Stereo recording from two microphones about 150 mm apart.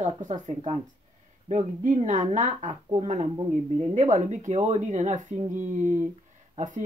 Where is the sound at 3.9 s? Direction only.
55° right (ahead or behind).